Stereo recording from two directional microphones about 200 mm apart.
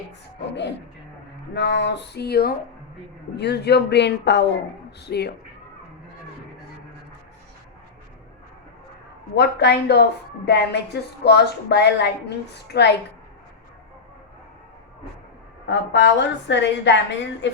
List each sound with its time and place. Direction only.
1.5 s a woman's voice: 60° left (ahead or behind)
9.3 s a woman's voice: 55° left (ahead or behind)
15.6 s a woman's voice: 60° left (ahead or behind)